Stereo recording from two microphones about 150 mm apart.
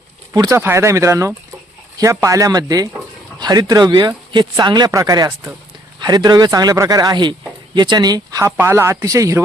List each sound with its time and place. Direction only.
0.3 s speech: 20° right (ahead or behind)